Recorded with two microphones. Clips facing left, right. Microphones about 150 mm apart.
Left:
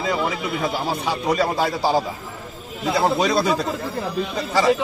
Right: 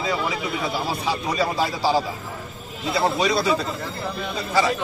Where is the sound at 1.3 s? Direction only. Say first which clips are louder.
Left 4 dB; 50° left (ahead or behind).